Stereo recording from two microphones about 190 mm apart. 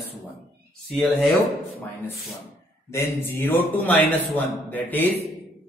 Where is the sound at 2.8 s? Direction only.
15° left (ahead or behind).